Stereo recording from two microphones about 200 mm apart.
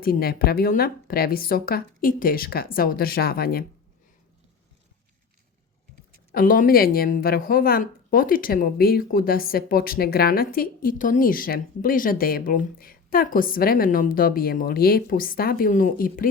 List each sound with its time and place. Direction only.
0.0 s a woman's voice: 50° left (ahead or behind)
6.3 s a woman's voice: 45° left (ahead or behind)